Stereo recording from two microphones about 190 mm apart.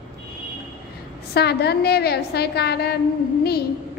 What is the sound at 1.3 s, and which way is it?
A woman's voice, 60° left (ahead or behind).